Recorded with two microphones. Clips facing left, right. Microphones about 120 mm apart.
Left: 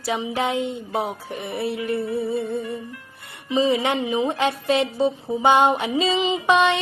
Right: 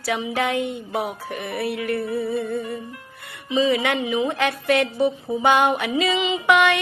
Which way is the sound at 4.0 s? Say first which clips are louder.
Even; 35° left (ahead or behind).